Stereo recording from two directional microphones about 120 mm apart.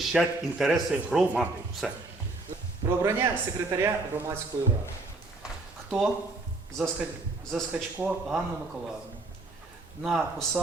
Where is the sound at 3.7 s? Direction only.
25° right (ahead or behind).